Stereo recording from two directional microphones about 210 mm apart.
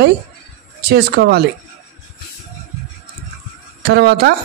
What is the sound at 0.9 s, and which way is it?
Speech, 50° right (ahead or behind).